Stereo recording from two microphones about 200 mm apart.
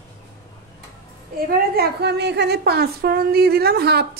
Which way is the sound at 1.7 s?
55° right (ahead or behind).